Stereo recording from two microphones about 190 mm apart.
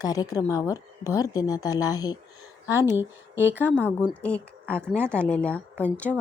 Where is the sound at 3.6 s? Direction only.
10° left (ahead or behind).